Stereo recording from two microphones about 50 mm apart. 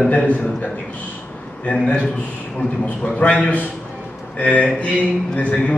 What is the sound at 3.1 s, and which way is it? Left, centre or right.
Speech, left.